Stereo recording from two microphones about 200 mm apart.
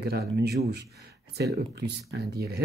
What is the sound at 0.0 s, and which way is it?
Speech, 55° right (ahead or behind).